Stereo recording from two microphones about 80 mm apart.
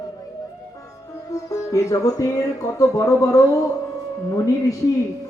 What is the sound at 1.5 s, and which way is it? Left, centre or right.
Music, left.